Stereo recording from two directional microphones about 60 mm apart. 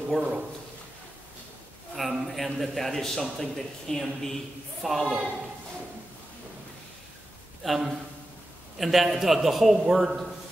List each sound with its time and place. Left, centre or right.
0.2 s a man's voice: centre
2.0 s a man's voice: centre
5.0 s a man's voice: centre
7.6 s a man's voice: centre